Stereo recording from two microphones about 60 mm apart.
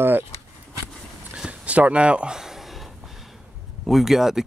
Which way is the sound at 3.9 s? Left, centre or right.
Centre.